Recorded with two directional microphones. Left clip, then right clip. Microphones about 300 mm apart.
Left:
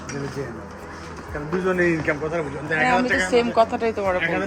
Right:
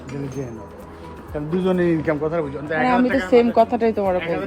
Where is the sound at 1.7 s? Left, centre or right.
Right.